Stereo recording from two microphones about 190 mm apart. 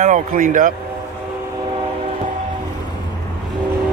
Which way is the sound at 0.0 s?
40° right (ahead or behind).